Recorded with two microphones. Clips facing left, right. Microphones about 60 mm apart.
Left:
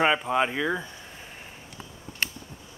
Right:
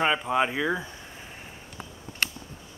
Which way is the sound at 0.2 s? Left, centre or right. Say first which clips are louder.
Even; centre.